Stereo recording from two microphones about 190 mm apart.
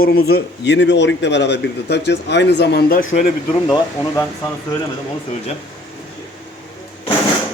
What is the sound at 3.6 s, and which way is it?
Speech, 20° left (ahead or behind).